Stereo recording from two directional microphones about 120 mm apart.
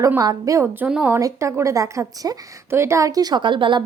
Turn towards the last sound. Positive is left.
turn(degrees=-40)  # may be behind; listen again after turning